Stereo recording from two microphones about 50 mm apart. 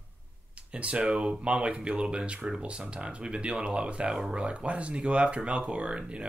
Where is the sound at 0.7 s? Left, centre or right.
Right.